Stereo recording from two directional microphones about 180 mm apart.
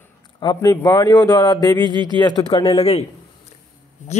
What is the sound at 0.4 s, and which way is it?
A man's voice, 20° left (ahead or behind).